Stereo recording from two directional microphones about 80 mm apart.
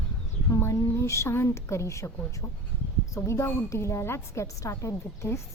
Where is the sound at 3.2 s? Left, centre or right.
Left.